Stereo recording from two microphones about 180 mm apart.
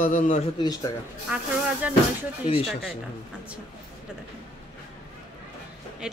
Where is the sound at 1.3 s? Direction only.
5° right (ahead or behind).